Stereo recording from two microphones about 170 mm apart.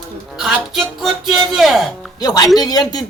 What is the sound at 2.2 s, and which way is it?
Speech, 20° left (ahead or behind).